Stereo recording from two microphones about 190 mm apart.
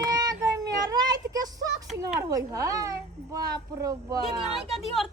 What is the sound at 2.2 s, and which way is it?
A woman's voice, 15° right (ahead or behind).